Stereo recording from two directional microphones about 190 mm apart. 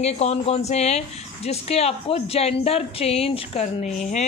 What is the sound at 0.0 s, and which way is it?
A man's voice, 35° left (ahead or behind).